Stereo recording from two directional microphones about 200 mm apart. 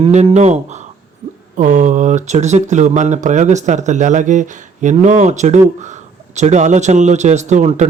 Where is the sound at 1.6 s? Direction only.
40° right (ahead or behind).